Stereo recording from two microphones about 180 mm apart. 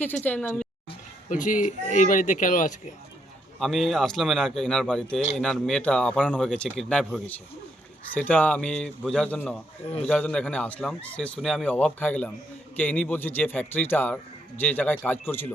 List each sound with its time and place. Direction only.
0.0 s speech: 10° left (ahead or behind)
1.3 s speech: 45° left (ahead or behind)
3.6 s speech: centre (ahead or behind)
9.8 s a man's voice: 30° left (ahead or behind)
10.1 s speech: 5° left (ahead or behind)